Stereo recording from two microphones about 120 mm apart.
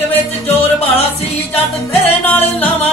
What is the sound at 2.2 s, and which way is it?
Music, 15° left (ahead or behind).